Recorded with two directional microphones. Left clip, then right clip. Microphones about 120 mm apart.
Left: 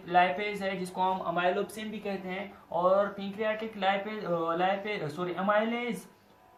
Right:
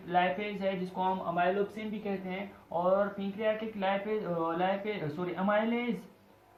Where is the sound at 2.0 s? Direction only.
55° left (ahead or behind).